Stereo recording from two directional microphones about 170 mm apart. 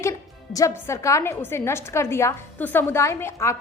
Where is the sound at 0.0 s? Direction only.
20° left (ahead or behind).